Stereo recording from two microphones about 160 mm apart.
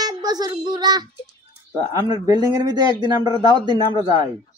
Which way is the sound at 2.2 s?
25° right (ahead or behind).